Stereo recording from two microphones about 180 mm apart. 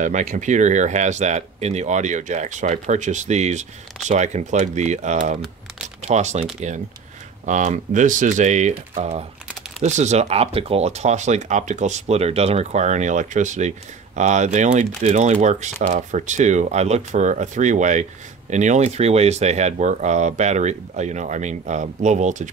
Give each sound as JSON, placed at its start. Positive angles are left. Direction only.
{"t": 0.0, "sound": "speech", "side_deg": -40}